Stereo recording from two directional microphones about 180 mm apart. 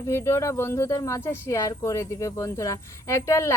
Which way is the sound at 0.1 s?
15° left (ahead or behind).